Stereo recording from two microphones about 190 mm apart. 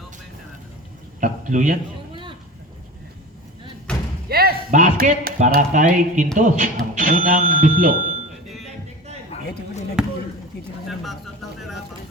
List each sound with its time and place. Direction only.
1.2 s a sound: 40° right (ahead or behind)
3.9 s slam: 5° left (ahead or behind)
4.3 s speech: 55° right (ahead or behind)
9.3 s basketball bounce: 35° left (ahead or behind)
10.0 s basketball bounce: 5° right (ahead or behind)
10.8 s a sound: centre (ahead or behind)